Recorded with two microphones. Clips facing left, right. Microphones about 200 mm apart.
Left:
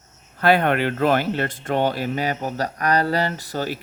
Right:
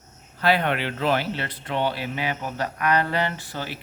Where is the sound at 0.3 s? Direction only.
50° left (ahead or behind).